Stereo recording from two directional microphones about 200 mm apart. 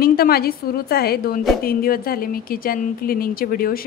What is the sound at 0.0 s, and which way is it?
A woman's voice, 50° left (ahead or behind).